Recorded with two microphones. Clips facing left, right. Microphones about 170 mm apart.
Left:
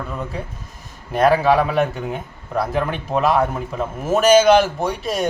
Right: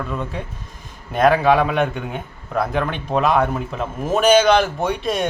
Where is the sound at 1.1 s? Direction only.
Centre (ahead or behind).